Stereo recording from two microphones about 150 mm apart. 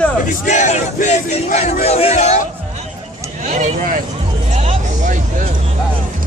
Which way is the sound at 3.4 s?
50° right (ahead or behind).